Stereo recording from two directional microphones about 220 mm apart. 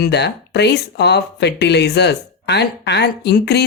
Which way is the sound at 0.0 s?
50° left (ahead or behind).